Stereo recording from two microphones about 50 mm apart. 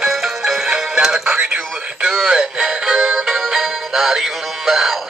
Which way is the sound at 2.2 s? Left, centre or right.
Centre.